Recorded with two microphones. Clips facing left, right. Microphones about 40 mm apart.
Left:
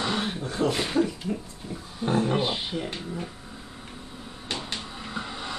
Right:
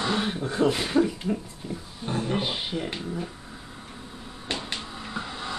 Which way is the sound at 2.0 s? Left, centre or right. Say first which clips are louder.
Left 6 dB; left.